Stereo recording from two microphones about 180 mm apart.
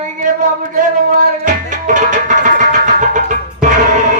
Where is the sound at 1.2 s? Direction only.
45° right (ahead or behind).